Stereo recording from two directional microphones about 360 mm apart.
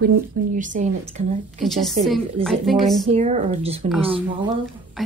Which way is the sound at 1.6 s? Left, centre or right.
Centre.